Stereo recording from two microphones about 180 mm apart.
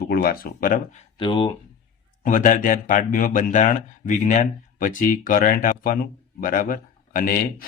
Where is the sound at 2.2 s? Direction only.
45° left (ahead or behind).